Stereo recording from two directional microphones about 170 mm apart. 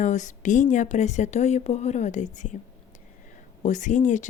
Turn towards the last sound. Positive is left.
turn(degrees=45)  # may be behind; listen again after turning